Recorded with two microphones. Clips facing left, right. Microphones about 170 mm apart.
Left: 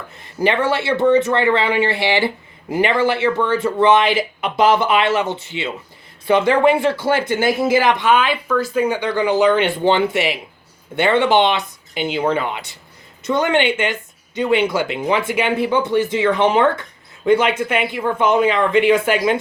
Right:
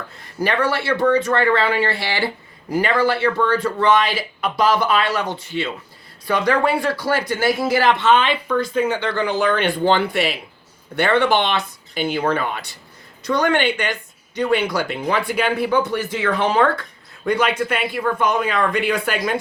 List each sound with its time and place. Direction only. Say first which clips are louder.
0.2 s speech: left 2 dB; 20° left (ahead or behind)